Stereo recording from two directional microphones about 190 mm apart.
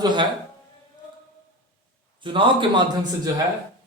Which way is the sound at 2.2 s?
25° right (ahead or behind).